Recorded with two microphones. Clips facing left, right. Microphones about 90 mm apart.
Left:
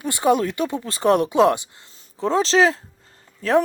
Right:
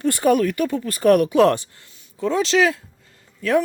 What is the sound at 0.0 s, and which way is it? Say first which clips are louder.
Speech: right 2 dB; 20° left (ahead or behind).